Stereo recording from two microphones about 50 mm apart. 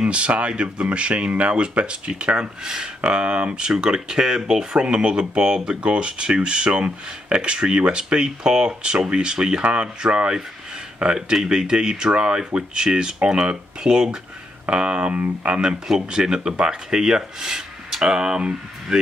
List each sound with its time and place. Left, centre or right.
0.0 s speech: right
15.6 s speech: centre